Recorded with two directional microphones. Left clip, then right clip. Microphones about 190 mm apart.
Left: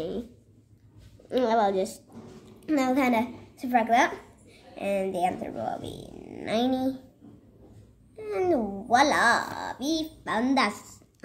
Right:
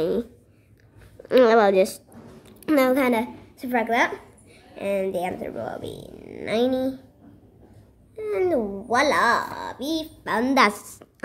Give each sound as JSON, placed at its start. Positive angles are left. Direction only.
{"t": 1.3, "sound": "a woman's voice", "side_deg": -50}
{"t": 8.2, "sound": "speech", "side_deg": -20}
{"t": 10.3, "sound": "a woman's voice", "side_deg": -40}